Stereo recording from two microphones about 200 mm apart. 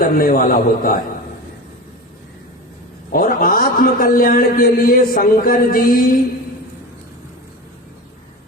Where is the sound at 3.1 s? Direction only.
45° left (ahead or behind).